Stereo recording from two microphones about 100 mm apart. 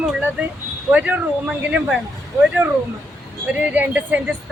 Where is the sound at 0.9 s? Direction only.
15° right (ahead or behind).